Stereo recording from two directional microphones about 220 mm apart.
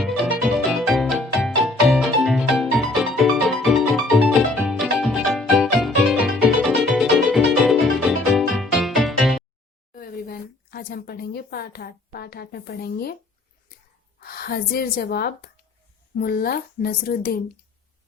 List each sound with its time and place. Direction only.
0.0 s music: centre (ahead or behind)
9.9 s a sound: 45° left (ahead or behind)
14.2 s speech: 45° left (ahead or behind)